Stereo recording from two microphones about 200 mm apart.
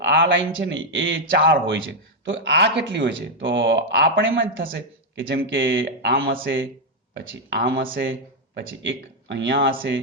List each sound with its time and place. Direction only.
0.0 s a man's voice: 65° right (ahead or behind)
7.1 s speech: 60° right (ahead or behind)
8.5 s speech: 70° right (ahead or behind)